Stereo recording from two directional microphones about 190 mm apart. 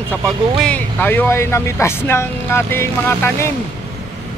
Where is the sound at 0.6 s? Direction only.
5° left (ahead or behind).